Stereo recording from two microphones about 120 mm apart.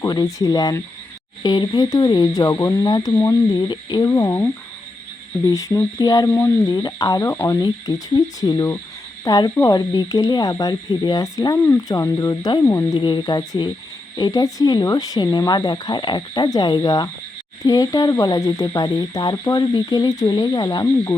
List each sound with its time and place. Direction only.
0.0 s speech: 30° left (ahead or behind)
3.5 s speech: 40° left (ahead or behind)
4.1 s speech: 25° left (ahead or behind)
5.5 s speech: 25° left (ahead or behind)
12.6 s speech: 20° left (ahead or behind)
13.0 s speech: 40° left (ahead or behind)